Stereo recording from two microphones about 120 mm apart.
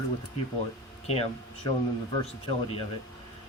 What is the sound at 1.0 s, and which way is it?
Speech, 60° left (ahead or behind).